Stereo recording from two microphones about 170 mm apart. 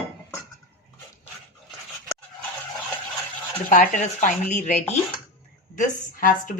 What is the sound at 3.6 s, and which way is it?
A woman's voice, 45° left (ahead or behind).